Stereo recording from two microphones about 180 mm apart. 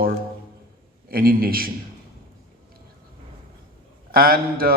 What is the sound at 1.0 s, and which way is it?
Speech, 55° right (ahead or behind).